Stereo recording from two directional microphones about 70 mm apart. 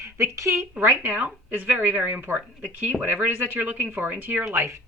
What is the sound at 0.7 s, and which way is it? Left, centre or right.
Speech, right.